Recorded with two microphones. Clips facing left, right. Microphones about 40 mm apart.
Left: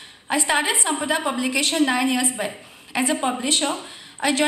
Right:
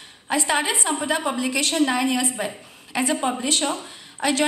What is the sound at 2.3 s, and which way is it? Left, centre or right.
A woman's voice, centre.